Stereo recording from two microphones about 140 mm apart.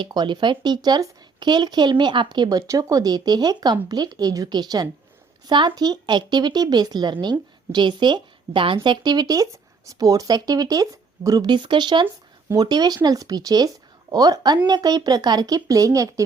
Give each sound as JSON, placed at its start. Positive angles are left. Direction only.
{"t": 0.0, "sound": "speech", "side_deg": -35}